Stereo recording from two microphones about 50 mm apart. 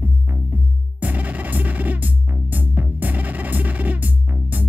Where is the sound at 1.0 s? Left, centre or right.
Right.